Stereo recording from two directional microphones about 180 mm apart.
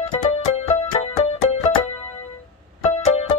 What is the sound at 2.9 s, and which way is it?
Music, 35° left (ahead or behind).